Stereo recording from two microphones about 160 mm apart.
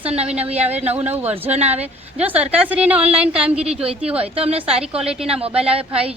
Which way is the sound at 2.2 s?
10° right (ahead or behind).